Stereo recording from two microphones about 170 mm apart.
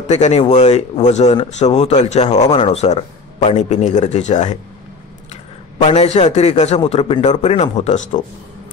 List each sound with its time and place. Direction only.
0.0 s speech: 40° left (ahead or behind)